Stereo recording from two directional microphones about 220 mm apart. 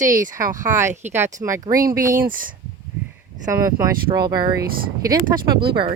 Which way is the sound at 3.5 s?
15° right (ahead or behind).